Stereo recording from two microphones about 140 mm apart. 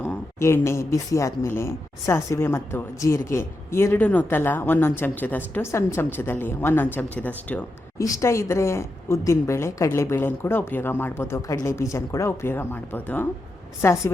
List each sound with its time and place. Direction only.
0.0 s speech: 15° left (ahead or behind)
7.9 s a woman's voice: 25° left (ahead or behind)